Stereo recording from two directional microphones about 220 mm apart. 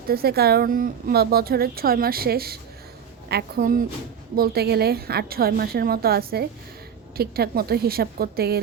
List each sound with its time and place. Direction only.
0.1 s a woman's voice: 45° right (ahead or behind)